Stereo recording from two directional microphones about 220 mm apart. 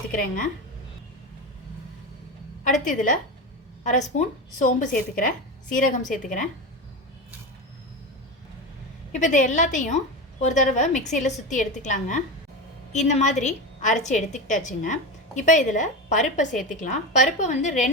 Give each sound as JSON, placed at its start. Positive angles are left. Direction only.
{"t": 0.1, "sound": "a woman's voice", "side_deg": 35}
{"t": 2.8, "sound": "a woman's voice", "side_deg": 35}
{"t": 9.1, "sound": "a woman's voice", "side_deg": 35}